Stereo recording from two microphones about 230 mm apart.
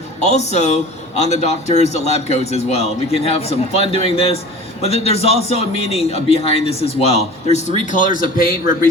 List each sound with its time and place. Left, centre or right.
0.2 s a man's voice: left